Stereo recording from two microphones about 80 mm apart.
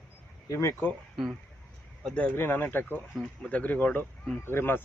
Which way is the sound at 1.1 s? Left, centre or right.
Centre.